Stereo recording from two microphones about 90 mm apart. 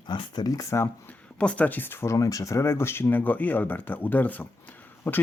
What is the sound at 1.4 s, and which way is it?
Speech, 15° left (ahead or behind).